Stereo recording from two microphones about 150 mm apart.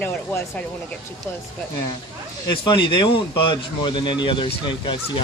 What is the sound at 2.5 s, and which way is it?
A man's voice, 35° left (ahead or behind).